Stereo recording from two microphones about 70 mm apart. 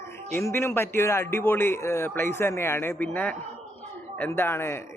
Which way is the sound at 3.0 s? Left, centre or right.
Left.